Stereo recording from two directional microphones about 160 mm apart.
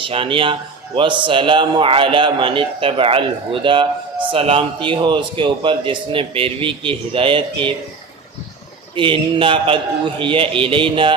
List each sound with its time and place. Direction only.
0.0 s a man's voice: 35° right (ahead or behind)
9.0 s a man's voice: 30° right (ahead or behind)